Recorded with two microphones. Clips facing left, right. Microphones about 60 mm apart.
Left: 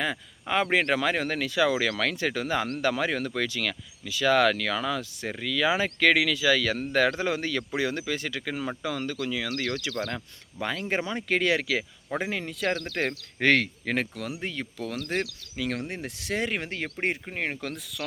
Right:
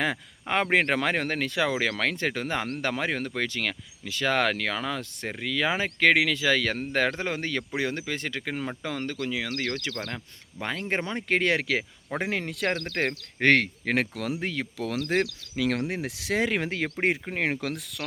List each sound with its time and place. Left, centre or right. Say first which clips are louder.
0.4 s speech: right 1 dB; right
12.2 s speech: right 2 dB; right
12.9 s speech: right 1 dB; right
13.9 s speech: right 3 dB; right
14.4 s speech: right 3 dB; right
17.3 s speech: right 3 dB; right